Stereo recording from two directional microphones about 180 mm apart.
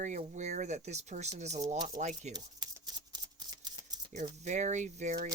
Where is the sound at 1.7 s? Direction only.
20° right (ahead or behind).